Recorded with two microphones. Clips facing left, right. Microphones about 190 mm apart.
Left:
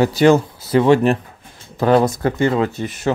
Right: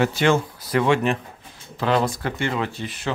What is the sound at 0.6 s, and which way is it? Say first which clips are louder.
Speech: left 7 dB; 30° left (ahead or behind).